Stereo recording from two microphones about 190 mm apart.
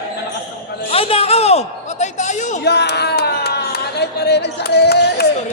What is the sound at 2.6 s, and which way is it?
Speech, 60° left (ahead or behind).